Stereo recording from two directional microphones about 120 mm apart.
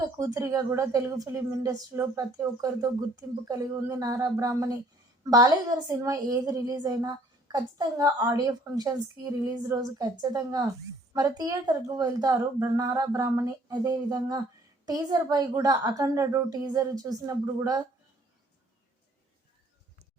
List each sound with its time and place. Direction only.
0.2 s a woman's voice: 30° right (ahead or behind)